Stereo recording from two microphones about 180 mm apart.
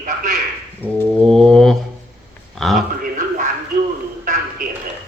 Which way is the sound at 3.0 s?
50° right (ahead or behind).